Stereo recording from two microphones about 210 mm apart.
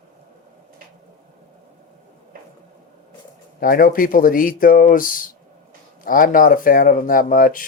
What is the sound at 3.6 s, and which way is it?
Speech, 45° left (ahead or behind).